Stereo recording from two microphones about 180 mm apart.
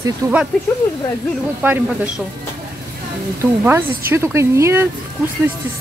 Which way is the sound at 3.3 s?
15° right (ahead or behind).